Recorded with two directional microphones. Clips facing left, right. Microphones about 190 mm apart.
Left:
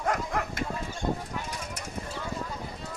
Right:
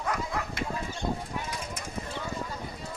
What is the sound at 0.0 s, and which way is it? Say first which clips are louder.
Bow-wow: left 2 dB; 50° left (ahead or behind).